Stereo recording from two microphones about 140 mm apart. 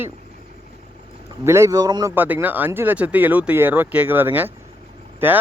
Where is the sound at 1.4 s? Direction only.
20° right (ahead or behind).